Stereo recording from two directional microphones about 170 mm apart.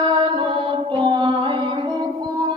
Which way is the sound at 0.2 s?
30° right (ahead or behind).